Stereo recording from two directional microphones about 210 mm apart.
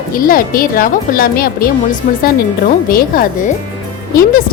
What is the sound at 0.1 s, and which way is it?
A woman's voice, 40° left (ahead or behind).